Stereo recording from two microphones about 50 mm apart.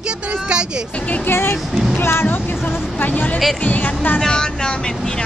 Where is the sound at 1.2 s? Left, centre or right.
Left.